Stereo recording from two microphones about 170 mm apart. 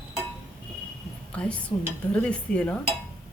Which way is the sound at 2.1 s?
5° left (ahead or behind).